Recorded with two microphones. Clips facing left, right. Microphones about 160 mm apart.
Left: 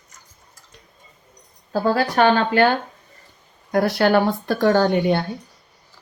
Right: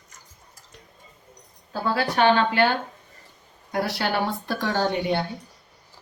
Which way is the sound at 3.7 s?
50° left (ahead or behind).